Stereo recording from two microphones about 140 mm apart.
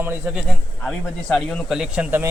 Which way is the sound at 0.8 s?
5° left (ahead or behind).